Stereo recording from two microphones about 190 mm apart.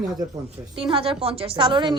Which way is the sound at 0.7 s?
25° right (ahead or behind).